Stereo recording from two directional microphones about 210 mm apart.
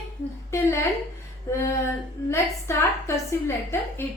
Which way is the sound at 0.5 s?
15° left (ahead or behind).